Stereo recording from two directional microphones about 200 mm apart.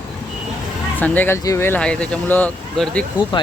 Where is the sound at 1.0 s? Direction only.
10° left (ahead or behind).